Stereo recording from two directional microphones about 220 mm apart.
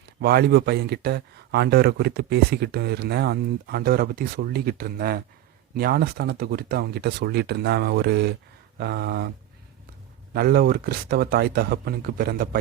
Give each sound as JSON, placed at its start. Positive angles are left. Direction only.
{"t": 0.2, "sound": "speech", "side_deg": -45}
{"t": 10.3, "sound": "speech", "side_deg": -45}